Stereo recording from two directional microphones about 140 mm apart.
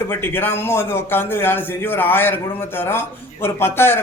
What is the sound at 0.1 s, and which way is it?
Speech, 15° left (ahead or behind).